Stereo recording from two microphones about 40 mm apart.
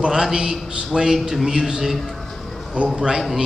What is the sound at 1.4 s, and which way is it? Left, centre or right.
Speech, centre.